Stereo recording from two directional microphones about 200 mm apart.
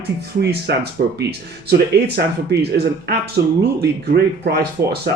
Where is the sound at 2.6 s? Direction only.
55° right (ahead or behind).